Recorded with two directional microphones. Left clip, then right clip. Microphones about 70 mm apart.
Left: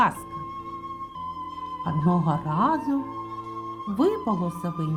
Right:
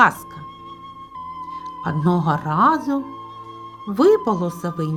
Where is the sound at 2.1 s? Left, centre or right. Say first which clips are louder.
Right 7 dB; right.